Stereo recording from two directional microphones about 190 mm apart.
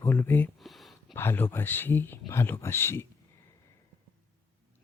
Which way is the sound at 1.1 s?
10° left (ahead or behind).